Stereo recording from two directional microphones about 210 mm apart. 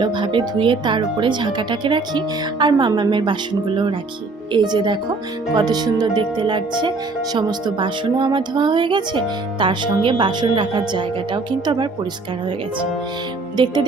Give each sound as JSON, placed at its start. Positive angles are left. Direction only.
{"t": 0.0, "sound": "speech", "side_deg": -25}
{"t": 4.5, "sound": "speech", "side_deg": -20}